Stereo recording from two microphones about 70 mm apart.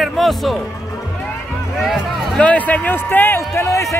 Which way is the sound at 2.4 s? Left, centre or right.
Left.